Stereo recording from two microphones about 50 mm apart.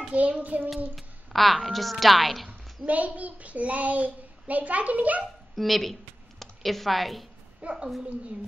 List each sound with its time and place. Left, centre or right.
0.1 s a child's voice: right
0.9 s a woman's voice: centre
2.9 s a child's voice: right
5.6 s a woman's voice: centre
7.6 s a child's voice: right